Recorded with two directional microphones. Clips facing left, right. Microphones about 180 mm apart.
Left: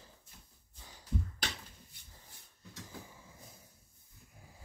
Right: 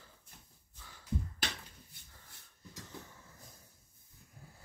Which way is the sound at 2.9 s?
10° left (ahead or behind).